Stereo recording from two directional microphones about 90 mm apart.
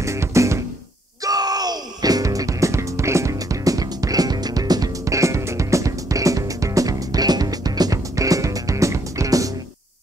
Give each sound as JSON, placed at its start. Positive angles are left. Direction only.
{"t": 0.0, "sound": "music", "side_deg": -35}
{"t": 1.2, "sound": "music", "side_deg": -45}